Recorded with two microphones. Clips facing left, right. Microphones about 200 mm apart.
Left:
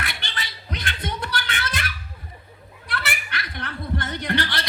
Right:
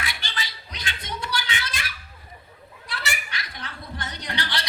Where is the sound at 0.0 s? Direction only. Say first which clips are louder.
Even; 60° left (ahead or behind).